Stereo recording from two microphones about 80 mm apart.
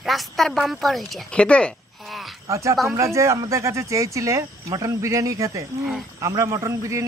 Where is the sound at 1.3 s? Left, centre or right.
Centre.